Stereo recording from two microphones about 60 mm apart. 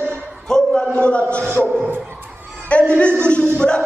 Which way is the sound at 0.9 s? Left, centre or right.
Centre.